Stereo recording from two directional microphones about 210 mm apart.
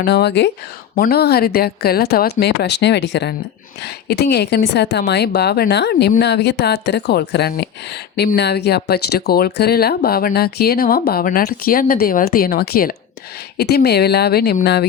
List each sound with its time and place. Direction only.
0.0 s speech: 50° left (ahead or behind)